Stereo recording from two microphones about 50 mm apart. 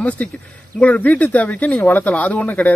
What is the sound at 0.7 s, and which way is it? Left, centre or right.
Speech, left.